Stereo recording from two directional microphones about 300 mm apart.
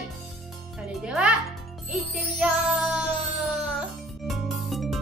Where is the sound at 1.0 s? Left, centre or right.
Centre.